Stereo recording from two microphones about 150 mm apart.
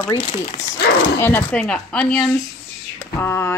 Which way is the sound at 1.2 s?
10° left (ahead or behind).